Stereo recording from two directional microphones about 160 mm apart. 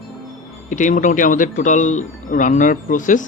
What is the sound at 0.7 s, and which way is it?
Speech, 50° left (ahead or behind).